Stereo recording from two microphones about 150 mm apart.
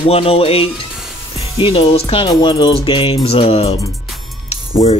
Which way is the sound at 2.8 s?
35° left (ahead or behind).